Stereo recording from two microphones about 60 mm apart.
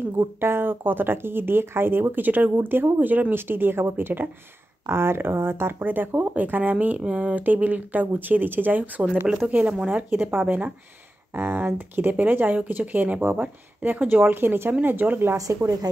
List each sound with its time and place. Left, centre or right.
0.4 s speech: right